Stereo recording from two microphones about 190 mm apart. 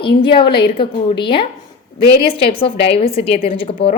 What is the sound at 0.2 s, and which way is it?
A woman's voice, 25° left (ahead or behind).